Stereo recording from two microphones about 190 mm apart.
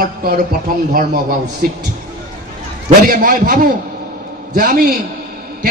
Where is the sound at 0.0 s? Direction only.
50° right (ahead or behind).